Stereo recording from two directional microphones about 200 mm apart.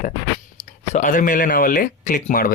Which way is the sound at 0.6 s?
40° left (ahead or behind).